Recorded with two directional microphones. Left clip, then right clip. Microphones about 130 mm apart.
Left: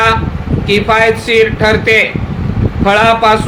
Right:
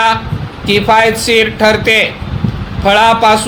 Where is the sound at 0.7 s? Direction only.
60° right (ahead or behind).